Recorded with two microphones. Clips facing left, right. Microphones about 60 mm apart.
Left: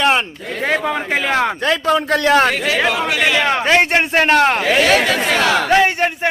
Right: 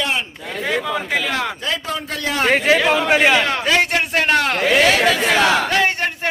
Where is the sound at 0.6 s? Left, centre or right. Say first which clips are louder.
Left 3 dB; left.